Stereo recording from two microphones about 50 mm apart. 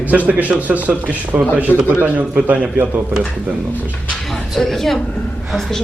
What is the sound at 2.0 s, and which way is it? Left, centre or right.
Speech, right.